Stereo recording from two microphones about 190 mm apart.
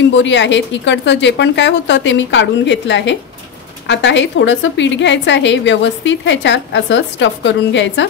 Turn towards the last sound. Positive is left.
turn(degrees=75)  # may be behind; listen again after turning